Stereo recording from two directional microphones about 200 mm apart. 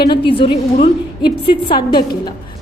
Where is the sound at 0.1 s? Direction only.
25° left (ahead or behind).